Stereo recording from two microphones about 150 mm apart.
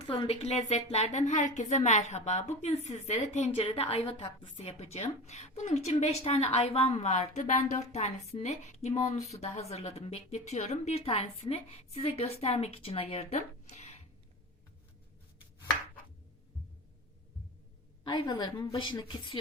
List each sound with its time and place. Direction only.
0.1 s a woman's voice: 40° left (ahead or behind)
18.0 s a woman's voice: 30° left (ahead or behind)